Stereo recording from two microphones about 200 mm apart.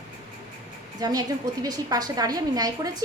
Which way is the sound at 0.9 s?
20° right (ahead or behind).